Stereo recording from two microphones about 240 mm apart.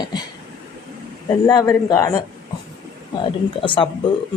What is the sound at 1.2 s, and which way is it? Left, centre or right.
Speech, centre.